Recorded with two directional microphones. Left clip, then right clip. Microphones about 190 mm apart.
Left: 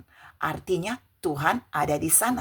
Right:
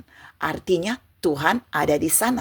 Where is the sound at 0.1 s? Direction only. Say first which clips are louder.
Right 3 dB; 25° right (ahead or behind).